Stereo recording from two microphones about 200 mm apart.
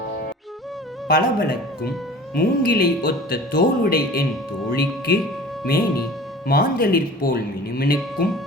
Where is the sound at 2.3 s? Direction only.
50° left (ahead or behind).